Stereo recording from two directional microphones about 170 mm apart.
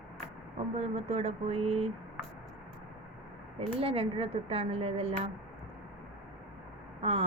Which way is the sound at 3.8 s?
35° right (ahead or behind).